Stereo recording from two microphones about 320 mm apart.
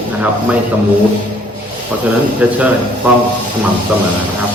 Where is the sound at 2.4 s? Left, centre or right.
Centre.